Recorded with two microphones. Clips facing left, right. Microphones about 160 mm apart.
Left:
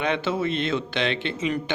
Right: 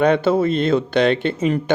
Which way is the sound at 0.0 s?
40° right (ahead or behind).